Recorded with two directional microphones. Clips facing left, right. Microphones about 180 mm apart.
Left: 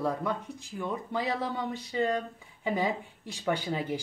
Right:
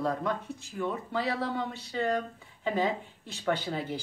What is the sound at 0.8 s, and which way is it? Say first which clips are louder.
Speech: right 1 dB; 15° left (ahead or behind).